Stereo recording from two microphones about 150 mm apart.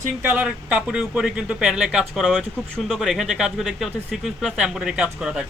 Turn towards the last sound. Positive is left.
turn(degrees=-5)  # may be behind; listen again after turning